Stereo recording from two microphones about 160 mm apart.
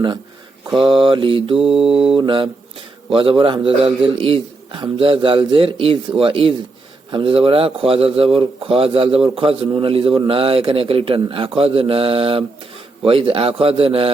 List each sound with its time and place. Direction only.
0.7 s a man's voice: 35° right (ahead or behind)